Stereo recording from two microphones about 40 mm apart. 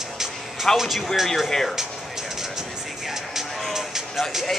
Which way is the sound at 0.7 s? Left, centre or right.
Centre.